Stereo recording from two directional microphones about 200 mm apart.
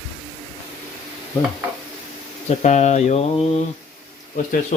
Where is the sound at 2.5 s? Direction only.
35° left (ahead or behind).